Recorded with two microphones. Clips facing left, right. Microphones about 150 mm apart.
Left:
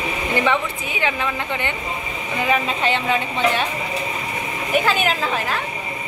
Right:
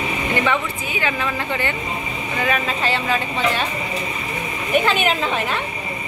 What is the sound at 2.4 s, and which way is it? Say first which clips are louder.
Speech: left 2 dB; 20° left (ahead or behind).